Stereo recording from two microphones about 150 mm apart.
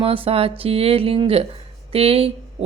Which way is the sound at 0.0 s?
40° right (ahead or behind).